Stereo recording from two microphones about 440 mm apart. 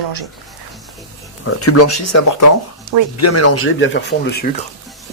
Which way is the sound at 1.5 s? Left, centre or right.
Left.